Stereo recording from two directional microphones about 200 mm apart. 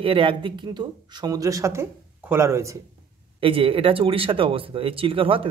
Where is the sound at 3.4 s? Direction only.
25° right (ahead or behind).